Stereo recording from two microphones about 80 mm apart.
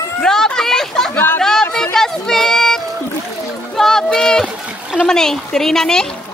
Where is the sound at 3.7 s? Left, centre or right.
Centre.